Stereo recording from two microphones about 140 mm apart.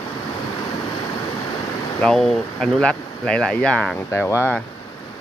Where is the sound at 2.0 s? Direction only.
5° left (ahead or behind).